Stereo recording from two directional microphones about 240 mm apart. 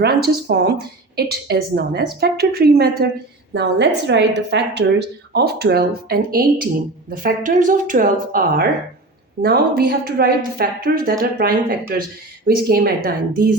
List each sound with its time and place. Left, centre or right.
0.0 s a woman's voice: right